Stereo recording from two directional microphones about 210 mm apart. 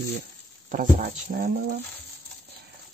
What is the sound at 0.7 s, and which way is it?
Speech, 40° right (ahead or behind).